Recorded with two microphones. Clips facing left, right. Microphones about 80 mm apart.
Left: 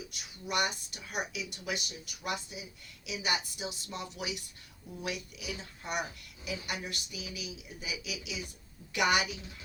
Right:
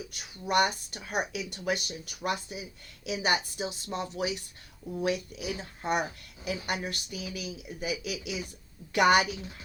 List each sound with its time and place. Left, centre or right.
0.1 s a woman's voice: right